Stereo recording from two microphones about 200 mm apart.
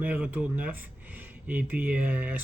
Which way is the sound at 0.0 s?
10° right (ahead or behind).